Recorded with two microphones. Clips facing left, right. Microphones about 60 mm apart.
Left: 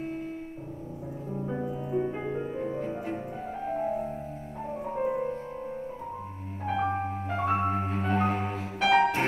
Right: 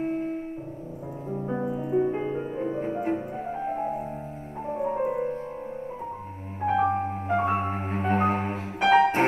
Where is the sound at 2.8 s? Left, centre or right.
Right; by 5.3 s centre.